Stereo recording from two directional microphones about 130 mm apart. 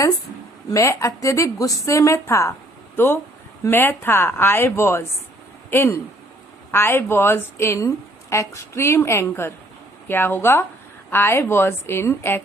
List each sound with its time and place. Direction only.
0.7 s a woman's voice: 25° left (ahead or behind)